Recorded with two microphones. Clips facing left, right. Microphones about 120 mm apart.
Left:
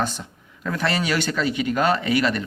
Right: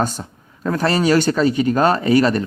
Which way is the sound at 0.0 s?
40° right (ahead or behind).